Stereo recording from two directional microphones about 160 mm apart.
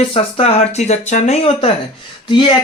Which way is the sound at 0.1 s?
40° left (ahead or behind).